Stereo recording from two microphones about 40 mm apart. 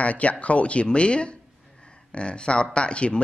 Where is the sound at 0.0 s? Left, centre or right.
Left.